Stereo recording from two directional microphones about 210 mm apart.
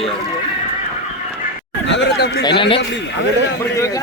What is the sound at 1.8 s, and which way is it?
Speech, 55° left (ahead or behind).